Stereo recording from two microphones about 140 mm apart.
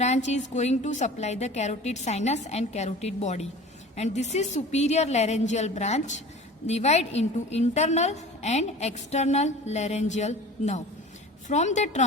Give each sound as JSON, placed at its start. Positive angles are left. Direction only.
{"t": 0.0, "sound": "a woman's voice", "side_deg": 55}